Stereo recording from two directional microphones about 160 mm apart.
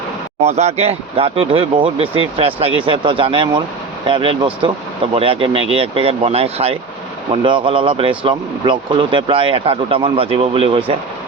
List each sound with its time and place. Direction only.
0.4 s speech: 45° right (ahead or behind)